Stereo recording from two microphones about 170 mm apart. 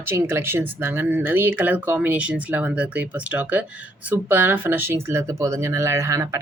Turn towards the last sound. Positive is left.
turn(degrees=-20)  # may be behind; listen again after turning